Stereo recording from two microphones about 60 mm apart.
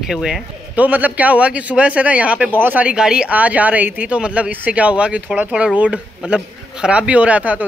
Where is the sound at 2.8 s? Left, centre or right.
Centre.